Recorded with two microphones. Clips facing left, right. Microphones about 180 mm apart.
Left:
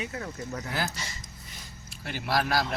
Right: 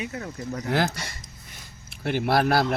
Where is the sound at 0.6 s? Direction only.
65° right (ahead or behind).